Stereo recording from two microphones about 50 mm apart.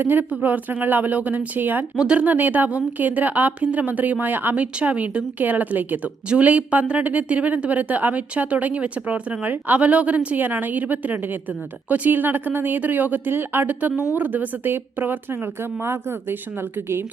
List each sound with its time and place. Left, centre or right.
0.0 s a woman's voice: right
2.0 s speech: centre
2.2 s a woman's voice: right
6.2 s a woman's voice: right